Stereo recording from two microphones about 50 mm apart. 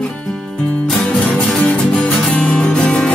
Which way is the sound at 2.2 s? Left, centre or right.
Centre.